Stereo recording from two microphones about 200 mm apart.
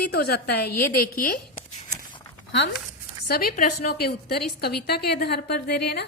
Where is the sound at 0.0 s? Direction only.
50° left (ahead or behind).